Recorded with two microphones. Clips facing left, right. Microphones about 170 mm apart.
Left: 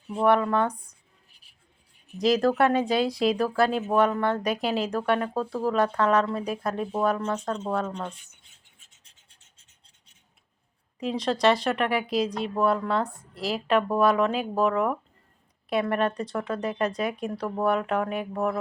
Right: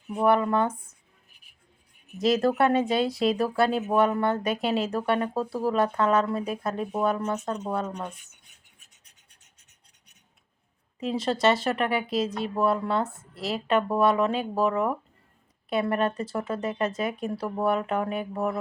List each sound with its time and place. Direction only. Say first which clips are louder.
0.2 s speech: even; 10° right (ahead or behind)
2.1 s speech: left 1 dB; centre (ahead or behind)
8.4 s filing: right 1 dB; 25° left (ahead or behind)
11.0 s speech: left 1 dB; 5° right (ahead or behind)